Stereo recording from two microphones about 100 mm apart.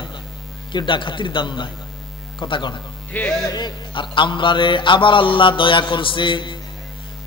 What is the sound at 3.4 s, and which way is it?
A man's voice, 45° left (ahead or behind).